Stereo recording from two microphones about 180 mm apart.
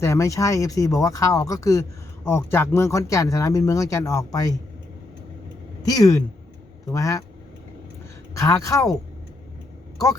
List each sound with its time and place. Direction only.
0.0 s speech: 15° left (ahead or behind)
5.8 s speech: 20° left (ahead or behind)
8.4 s speech: 15° left (ahead or behind)